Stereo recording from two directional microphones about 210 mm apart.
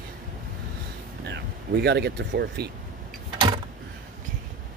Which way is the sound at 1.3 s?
55° right (ahead or behind).